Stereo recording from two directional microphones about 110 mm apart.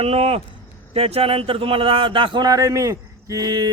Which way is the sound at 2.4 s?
30° right (ahead or behind).